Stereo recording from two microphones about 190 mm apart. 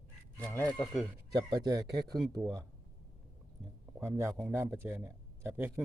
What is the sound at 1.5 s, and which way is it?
A man's voice, 20° right (ahead or behind).